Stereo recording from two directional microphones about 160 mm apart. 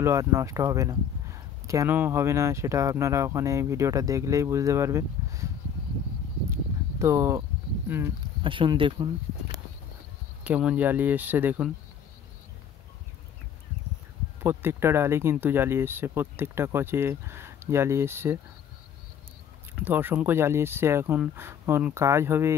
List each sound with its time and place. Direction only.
0.0 s speech: 20° right (ahead or behind)
6.5 s a sound: 15° right (ahead or behind)
8.4 s speech: 30° right (ahead or behind)
10.4 s speech: 10° right (ahead or behind)
14.4 s speech: 15° right (ahead or behind)
19.8 s speech: 15° right (ahead or behind)